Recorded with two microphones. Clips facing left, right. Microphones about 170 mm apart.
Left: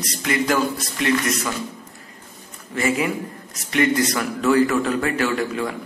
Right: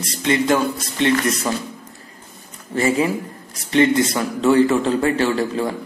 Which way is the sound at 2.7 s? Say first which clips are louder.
Right 3 dB; 30° right (ahead or behind).